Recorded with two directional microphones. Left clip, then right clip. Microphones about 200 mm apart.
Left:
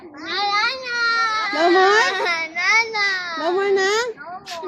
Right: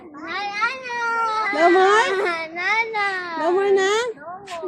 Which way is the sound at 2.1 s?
55° right (ahead or behind).